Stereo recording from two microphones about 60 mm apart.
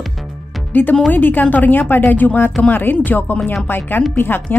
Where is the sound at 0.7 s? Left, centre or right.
Left.